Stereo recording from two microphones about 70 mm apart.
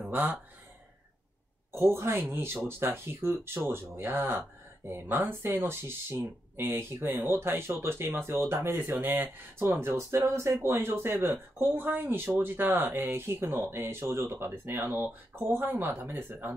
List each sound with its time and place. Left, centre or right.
0.1 s speech: right
1.7 s speech: right
15.0 s speech: right